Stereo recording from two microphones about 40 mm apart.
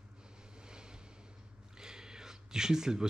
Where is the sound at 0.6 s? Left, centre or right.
Centre.